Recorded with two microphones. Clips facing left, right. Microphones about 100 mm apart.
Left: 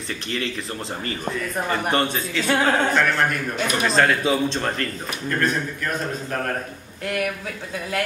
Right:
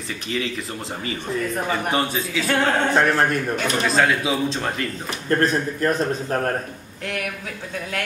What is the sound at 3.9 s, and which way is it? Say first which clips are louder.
A man's voice: left 1 dB; centre (ahead or behind).